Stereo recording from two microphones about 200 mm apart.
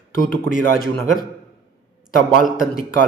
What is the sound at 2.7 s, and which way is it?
Speech, 45° left (ahead or behind).